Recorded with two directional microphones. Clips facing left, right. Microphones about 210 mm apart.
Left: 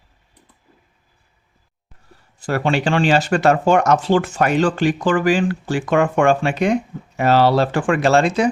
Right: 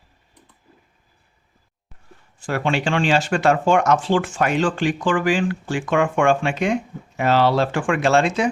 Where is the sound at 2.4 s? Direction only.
40° left (ahead or behind).